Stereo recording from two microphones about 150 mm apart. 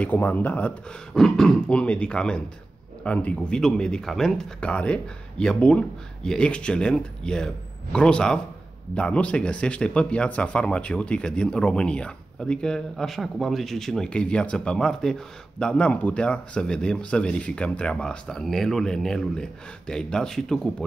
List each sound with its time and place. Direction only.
0.0 s speech: 10° left (ahead or behind)